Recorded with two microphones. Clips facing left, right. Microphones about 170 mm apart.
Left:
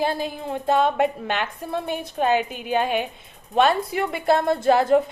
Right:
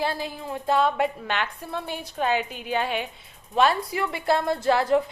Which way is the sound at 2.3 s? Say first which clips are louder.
Left 5 dB; 15° left (ahead or behind).